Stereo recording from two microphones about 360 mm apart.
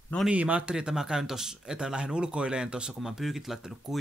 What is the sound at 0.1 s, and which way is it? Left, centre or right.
Speech, centre.